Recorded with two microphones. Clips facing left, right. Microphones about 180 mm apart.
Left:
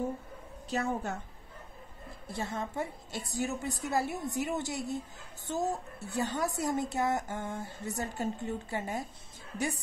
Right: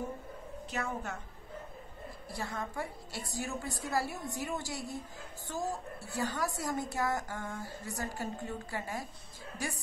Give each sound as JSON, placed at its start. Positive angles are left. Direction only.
{"t": 0.7, "sound": "a woman's voice", "side_deg": 30}
{"t": 2.2, "sound": "a woman's voice", "side_deg": 25}